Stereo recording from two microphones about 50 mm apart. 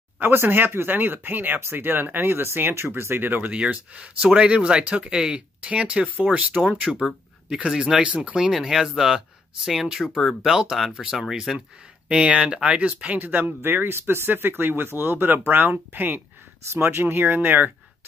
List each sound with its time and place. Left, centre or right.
0.2 s speech: right
3.3 s speech: right
3.5 s speech: right
6.3 s speech: centre
6.7 s speech: right
8.4 s speech: centre
10.1 s speech: centre
10.5 s speech: centre
12.1 s speech: right
13.2 s speech: right
16.6 s speech: right